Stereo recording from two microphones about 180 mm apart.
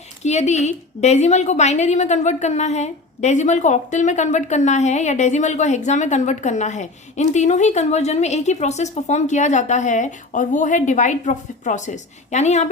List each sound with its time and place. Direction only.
0.2 s a woman's voice: 40° left (ahead or behind)